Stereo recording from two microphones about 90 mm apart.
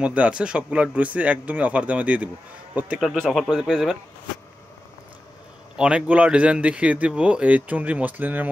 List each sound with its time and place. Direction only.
0.0 s a man's voice: 15° right (ahead or behind)
3.0 s speech: centre (ahead or behind)
5.8 s speech: 15° right (ahead or behind)